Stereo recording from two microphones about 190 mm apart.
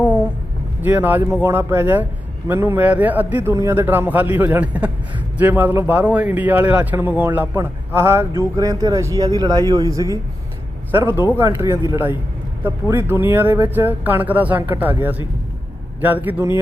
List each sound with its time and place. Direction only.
0.8 s a man's voice: 10° right (ahead or behind)